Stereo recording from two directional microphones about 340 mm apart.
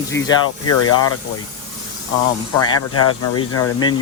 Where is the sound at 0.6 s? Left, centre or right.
Left.